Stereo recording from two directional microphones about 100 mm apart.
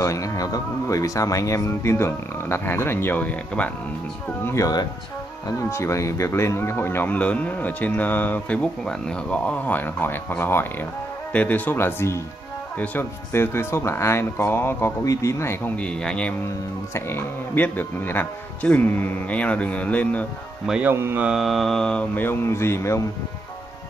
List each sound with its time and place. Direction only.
0.0 s speech: 30° left (ahead or behind); by 3.7 s 15° left (ahead or behind)
4.5 s speech: 35° left (ahead or behind); by 13.0 s 15° left (ahead or behind)
13.3 s speech: 25° left (ahead or behind)
15.7 s speech: 10° left (ahead or behind)
16.9 s speech: 20° left (ahead or behind)
20.9 s mantra: 25° right (ahead or behind)
21.3 s mantra: centre (ahead or behind)
22.2 s speech: 25° left (ahead or behind)